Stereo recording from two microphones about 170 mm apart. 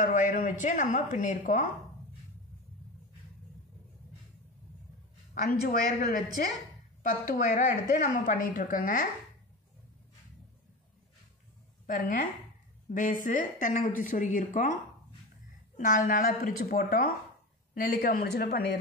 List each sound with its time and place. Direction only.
0.0 s a woman's voice: 50° left (ahead or behind)
5.3 s a woman's voice: 55° left (ahead or behind)
11.8 s a woman's voice: 50° left (ahead or behind)
15.8 s speech: 45° left (ahead or behind); by 18.6 s 70° left (ahead or behind)